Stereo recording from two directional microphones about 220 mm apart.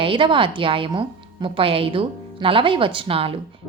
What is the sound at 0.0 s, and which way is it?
Speech, 25° right (ahead or behind).